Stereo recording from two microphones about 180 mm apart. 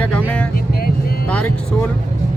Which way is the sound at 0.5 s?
55° left (ahead or behind).